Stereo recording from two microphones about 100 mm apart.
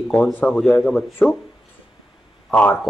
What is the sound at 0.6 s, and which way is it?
Speech, 10° left (ahead or behind).